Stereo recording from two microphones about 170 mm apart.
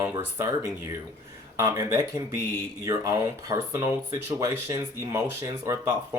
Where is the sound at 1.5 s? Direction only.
15° right (ahead or behind).